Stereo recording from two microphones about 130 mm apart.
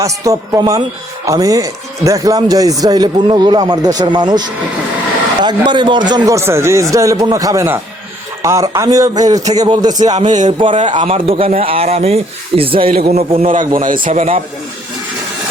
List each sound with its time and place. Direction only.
0.0 s speech: 25° right (ahead or behind)
10.2 s a sound: 70° right (ahead or behind)
10.8 s speech: 40° right (ahead or behind)
13.0 s a man's voice: 55° right (ahead or behind)
13.4 s a man's voice: 90° right
14.1 s speech: 50° right (ahead or behind)